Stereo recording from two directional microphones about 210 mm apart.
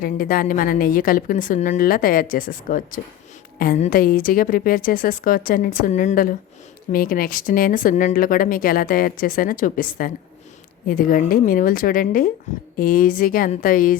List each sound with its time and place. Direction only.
0.0 s a woman's voice: 40° left (ahead or behind)